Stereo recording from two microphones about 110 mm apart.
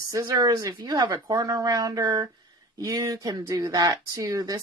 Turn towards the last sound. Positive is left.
turn(degrees=-30)  # may be behind; listen again after turning